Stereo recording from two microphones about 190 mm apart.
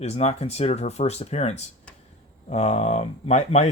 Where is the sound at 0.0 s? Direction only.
35° left (ahead or behind).